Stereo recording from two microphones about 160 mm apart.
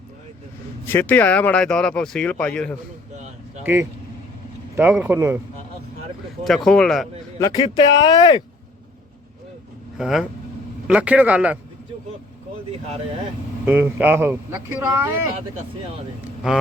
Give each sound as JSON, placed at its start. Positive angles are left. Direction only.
{"t": 0.9, "sound": "speech", "side_deg": 10}
{"t": 3.6, "sound": "speech", "side_deg": -15}
{"t": 6.7, "sound": "speech", "side_deg": 5}
{"t": 7.3, "sound": "speech", "side_deg": 25}
{"t": 10.0, "sound": "speech", "side_deg": 0}
{"t": 13.7, "sound": "speech", "side_deg": -15}
{"t": 16.4, "sound": "speech", "side_deg": -5}